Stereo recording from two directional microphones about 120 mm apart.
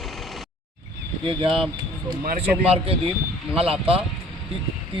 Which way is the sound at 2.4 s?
55° right (ahead or behind).